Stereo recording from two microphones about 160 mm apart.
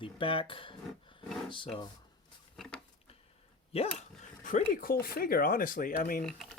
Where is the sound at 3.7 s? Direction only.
50° left (ahead or behind).